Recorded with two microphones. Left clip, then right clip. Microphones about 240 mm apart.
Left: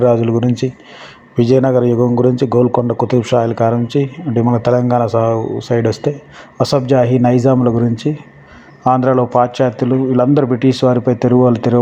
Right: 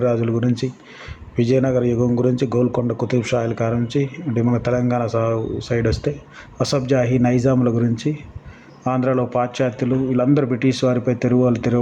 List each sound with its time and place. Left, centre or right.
0.0 s a man's voice: centre